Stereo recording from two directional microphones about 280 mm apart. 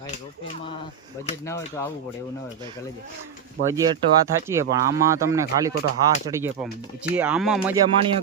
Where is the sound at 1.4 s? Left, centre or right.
Centre.